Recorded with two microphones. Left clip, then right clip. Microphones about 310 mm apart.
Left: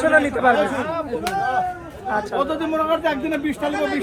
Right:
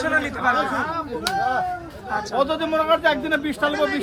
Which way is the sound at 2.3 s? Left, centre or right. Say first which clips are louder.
Right 3 dB; right.